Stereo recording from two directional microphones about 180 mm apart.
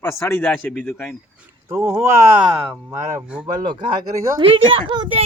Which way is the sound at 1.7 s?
15° right (ahead or behind).